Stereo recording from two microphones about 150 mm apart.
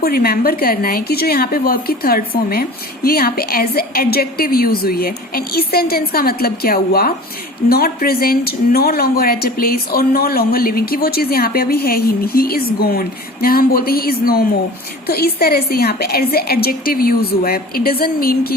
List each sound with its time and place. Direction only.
0.0 s a woman's voice: 90° left